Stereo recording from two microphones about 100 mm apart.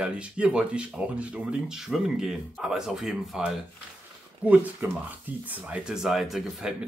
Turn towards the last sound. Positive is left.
turn(degrees=0)  # may be behind; listen again after turning